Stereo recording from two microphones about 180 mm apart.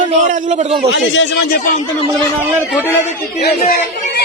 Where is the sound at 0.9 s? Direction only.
80° left.